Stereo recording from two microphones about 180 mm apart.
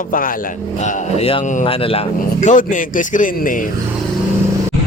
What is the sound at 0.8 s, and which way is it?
Speech, 40° left (ahead or behind).